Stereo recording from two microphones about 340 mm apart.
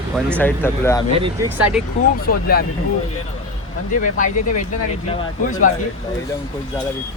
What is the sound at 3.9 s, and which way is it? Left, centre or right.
Speech, left.